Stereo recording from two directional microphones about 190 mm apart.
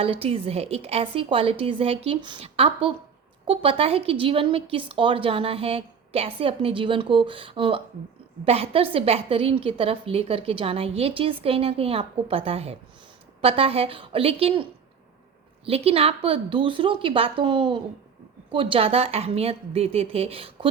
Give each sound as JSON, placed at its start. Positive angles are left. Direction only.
{"t": 0.0, "sound": "a woman's voice", "side_deg": -30}